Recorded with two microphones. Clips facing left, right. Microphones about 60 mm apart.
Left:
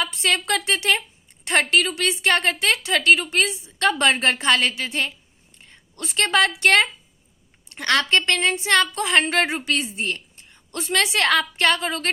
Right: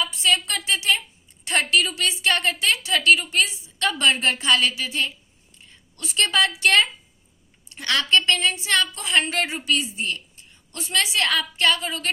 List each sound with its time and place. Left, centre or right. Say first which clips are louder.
0.0 s a woman's voice: even; left